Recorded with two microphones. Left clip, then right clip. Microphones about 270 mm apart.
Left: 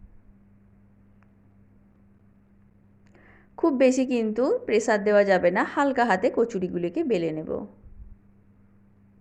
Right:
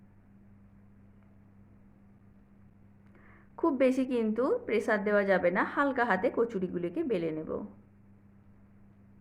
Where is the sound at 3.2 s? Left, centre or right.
Centre.